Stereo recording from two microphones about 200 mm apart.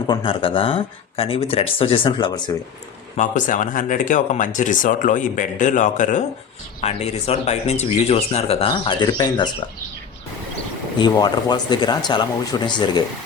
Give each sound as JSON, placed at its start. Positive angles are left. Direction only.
{"t": 0.1, "sound": "speech", "side_deg": 25}
{"t": 3.2, "sound": "speech", "side_deg": 40}
{"t": 10.9, "sound": "speech", "side_deg": 20}